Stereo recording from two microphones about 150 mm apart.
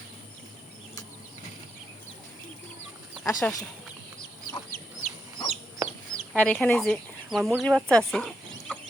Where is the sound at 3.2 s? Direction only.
20° left (ahead or behind).